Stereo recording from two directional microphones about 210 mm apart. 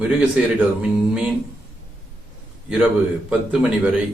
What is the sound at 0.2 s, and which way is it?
Speech, 5° right (ahead or behind).